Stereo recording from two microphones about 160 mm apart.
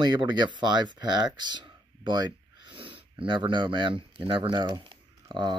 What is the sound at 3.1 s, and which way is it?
Speech, 30° right (ahead or behind).